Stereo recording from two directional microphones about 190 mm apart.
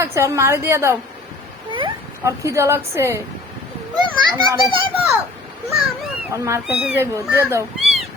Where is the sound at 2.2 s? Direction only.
15° right (ahead or behind).